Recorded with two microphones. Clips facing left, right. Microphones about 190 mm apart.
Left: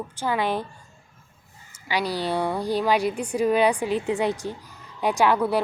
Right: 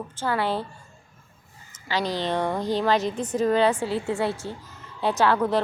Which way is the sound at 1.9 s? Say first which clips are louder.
Even; 10° left (ahead or behind).